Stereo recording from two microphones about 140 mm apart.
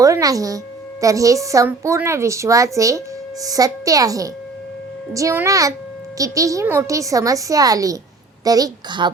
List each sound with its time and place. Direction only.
0.0 s a woman's voice: 25° right (ahead or behind)